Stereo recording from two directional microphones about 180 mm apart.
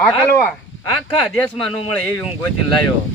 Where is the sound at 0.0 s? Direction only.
5° left (ahead or behind).